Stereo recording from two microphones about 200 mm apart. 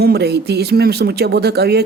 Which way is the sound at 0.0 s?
55° right (ahead or behind).